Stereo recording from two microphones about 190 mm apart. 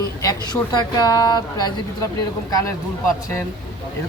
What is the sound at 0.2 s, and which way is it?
Speech, 20° left (ahead or behind).